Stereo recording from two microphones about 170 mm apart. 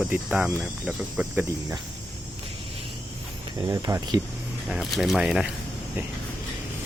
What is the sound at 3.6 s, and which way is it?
Speech, 20° right (ahead or behind).